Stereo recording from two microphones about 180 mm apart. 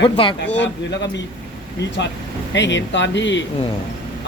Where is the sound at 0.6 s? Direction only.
75° left (ahead or behind).